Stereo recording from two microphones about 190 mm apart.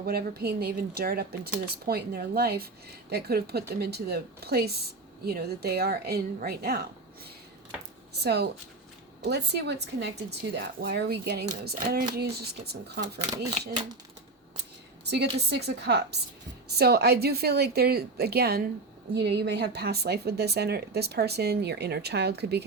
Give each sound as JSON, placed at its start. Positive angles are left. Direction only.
{"t": 0.0, "sound": "a woman's voice", "side_deg": -55}
{"t": 8.1, "sound": "a woman's voice", "side_deg": -60}
{"t": 15.1, "sound": "a woman's voice", "side_deg": -60}